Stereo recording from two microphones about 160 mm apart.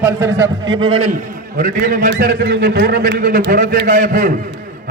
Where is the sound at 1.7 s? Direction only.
60° right (ahead or behind).